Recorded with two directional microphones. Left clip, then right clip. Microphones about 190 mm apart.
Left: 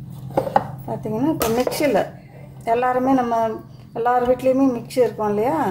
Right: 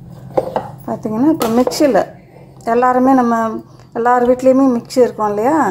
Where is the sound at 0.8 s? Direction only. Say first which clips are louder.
Right 7 dB; 30° right (ahead or behind).